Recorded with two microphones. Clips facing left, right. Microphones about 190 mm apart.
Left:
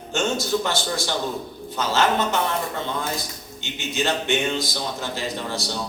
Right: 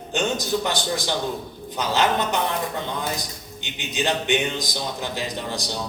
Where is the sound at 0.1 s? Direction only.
15° right (ahead or behind).